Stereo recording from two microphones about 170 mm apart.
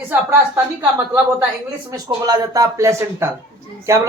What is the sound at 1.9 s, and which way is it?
Speech, 20° right (ahead or behind).